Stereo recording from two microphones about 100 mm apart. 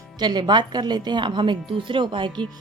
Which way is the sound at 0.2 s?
50° right (ahead or behind).